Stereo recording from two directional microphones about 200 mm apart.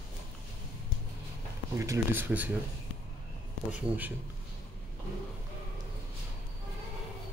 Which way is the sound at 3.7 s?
10° right (ahead or behind).